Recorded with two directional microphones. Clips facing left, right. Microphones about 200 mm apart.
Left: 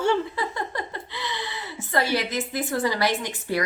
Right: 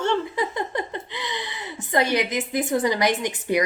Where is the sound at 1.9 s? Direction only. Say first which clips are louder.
Right 3 dB; 20° right (ahead or behind).